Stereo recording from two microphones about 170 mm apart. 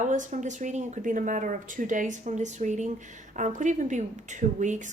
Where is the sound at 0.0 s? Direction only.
45° right (ahead or behind).